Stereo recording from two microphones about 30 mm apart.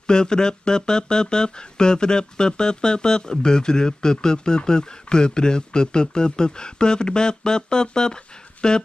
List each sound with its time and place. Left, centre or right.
0.0 s speech: left